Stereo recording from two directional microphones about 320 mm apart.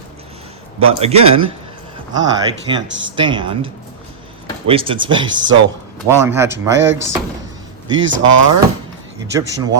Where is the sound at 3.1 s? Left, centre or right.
Centre.